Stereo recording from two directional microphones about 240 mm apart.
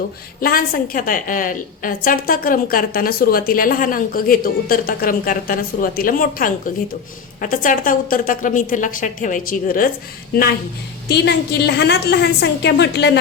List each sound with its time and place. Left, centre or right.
0.4 s a woman's voice: left
11.1 s a woman's voice: left